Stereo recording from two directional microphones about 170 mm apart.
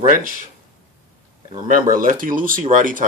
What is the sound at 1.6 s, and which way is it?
Speech, 55° right (ahead or behind).